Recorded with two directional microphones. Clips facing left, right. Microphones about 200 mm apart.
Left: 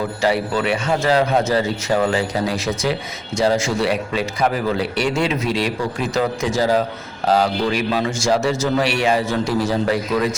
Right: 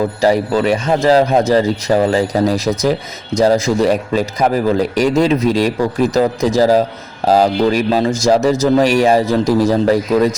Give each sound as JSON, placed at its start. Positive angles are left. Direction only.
{"t": 0.2, "sound": "a man's voice", "side_deg": -40}